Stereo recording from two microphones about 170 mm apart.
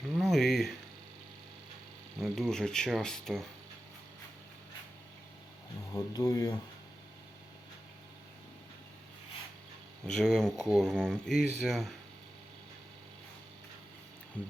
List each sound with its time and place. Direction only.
0.1 s a sound: centre (ahead or behind)
2.2 s speech: centre (ahead or behind)
5.9 s speech: 20° left (ahead or behind)
10.1 s speech: 5° left (ahead or behind)